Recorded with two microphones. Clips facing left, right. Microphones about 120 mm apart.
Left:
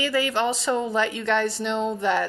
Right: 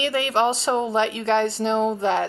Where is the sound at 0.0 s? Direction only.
25° right (ahead or behind).